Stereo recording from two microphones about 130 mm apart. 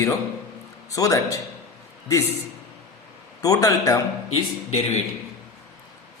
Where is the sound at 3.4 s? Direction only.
25° left (ahead or behind).